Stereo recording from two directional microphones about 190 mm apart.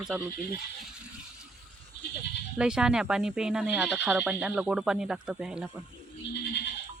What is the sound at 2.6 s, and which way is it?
Speech, 5° right (ahead or behind).